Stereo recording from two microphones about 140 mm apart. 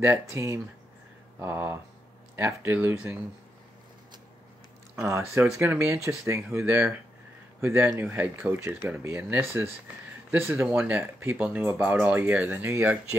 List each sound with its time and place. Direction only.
0.3 s speech: 20° right (ahead or behind)
4.9 s speech: 20° right (ahead or behind)